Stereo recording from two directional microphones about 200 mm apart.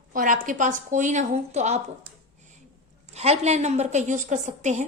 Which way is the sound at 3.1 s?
30° right (ahead or behind).